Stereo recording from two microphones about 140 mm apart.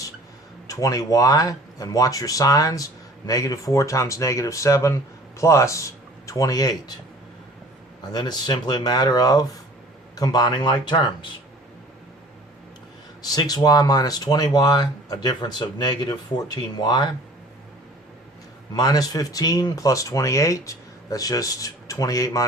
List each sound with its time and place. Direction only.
0.7 s speech: 25° left (ahead or behind)
8.1 s speech: 30° left (ahead or behind)
13.2 s speech: 30° left (ahead or behind)
18.7 s speech: 30° left (ahead or behind)